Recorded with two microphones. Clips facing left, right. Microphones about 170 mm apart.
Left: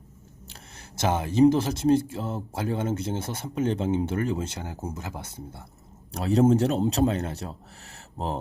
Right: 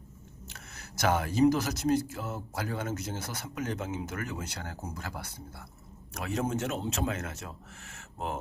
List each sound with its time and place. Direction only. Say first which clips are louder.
0.4 s speech: left 2 dB; 30° left (ahead or behind)